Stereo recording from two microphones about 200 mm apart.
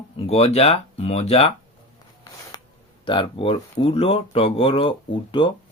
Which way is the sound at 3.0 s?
25° left (ahead or behind).